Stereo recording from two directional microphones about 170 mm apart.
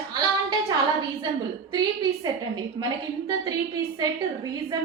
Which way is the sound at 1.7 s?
25° right (ahead or behind).